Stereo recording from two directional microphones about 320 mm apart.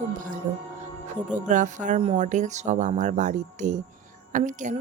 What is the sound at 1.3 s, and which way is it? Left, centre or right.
Speech, right.